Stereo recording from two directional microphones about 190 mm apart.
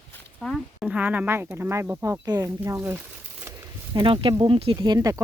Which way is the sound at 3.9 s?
25° right (ahead or behind).